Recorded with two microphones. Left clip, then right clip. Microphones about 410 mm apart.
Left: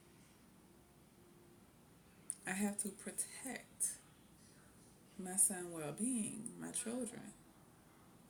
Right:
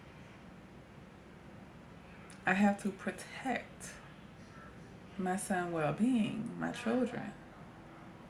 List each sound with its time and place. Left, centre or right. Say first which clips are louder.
2.4 s speech: right 12 dB; left
5.2 s speech: right 9 dB; left